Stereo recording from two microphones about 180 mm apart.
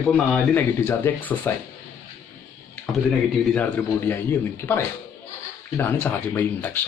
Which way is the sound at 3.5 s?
5° left (ahead or behind).